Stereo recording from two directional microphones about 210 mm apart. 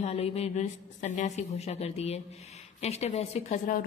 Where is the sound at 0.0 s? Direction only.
30° left (ahead or behind).